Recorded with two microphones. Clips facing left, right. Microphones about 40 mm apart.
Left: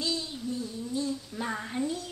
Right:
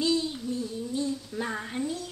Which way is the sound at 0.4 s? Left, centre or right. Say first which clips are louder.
Right 2 dB; centre.